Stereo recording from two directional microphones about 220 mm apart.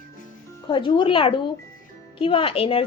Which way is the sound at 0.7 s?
20° left (ahead or behind).